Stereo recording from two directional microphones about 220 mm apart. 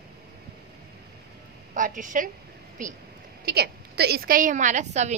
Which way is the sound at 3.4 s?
45° right (ahead or behind).